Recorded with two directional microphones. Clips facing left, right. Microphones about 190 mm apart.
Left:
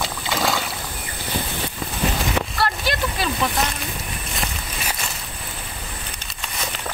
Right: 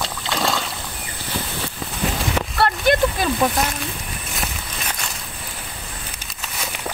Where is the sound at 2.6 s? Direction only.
55° right (ahead or behind).